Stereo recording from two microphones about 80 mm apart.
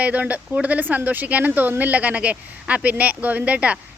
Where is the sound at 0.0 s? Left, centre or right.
Centre.